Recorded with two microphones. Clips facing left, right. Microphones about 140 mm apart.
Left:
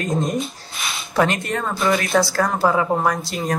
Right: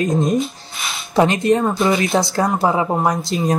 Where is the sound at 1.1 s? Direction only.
20° right (ahead or behind).